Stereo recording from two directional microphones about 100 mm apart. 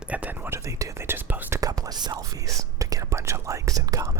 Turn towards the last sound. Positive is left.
turn(degrees=-35)  # may be behind; listen again after turning